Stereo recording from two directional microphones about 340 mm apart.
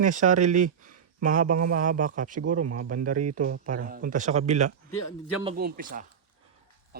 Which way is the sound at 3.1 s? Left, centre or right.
Right.